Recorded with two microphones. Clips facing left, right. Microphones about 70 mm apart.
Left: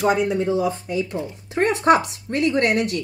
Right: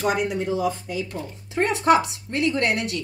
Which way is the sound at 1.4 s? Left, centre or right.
Left.